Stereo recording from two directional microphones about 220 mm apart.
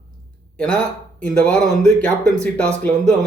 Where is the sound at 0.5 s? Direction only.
5° left (ahead or behind).